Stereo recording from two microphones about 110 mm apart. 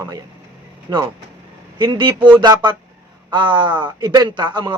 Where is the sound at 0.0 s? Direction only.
35° right (ahead or behind).